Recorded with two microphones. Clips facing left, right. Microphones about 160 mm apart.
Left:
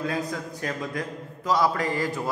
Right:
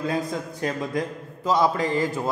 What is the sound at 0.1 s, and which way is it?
A man's voice, 25° right (ahead or behind).